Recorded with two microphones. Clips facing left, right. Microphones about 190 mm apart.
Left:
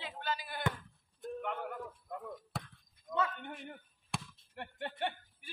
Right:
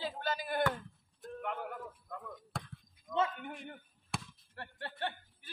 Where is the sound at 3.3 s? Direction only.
Centre (ahead or behind).